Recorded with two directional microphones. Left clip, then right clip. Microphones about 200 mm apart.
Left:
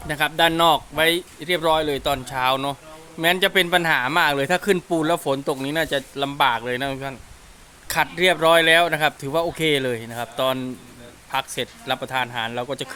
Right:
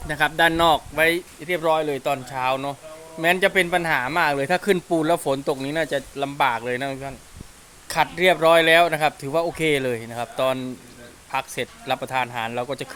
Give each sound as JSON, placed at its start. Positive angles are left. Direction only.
{"t": 0.1, "sound": "speech", "side_deg": 0}